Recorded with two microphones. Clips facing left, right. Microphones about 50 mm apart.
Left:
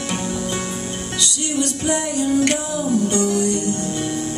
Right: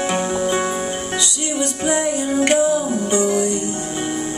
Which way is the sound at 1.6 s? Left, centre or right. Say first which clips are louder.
Right 2 dB; centre.